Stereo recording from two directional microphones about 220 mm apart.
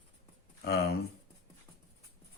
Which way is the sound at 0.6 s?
45° left (ahead or behind).